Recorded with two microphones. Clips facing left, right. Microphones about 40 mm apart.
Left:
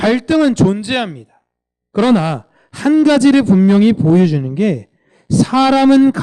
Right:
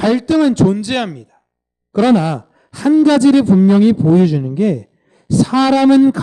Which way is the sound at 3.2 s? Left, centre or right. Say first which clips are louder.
Even; left.